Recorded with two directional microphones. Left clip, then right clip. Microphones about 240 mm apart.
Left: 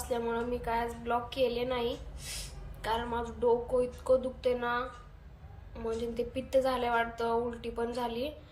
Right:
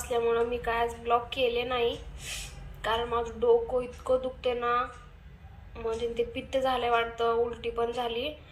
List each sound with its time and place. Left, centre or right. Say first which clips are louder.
0.1 s a woman's voice: right 6 dB; centre